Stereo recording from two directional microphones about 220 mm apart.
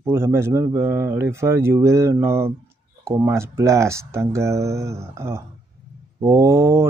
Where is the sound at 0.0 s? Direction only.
10° right (ahead or behind).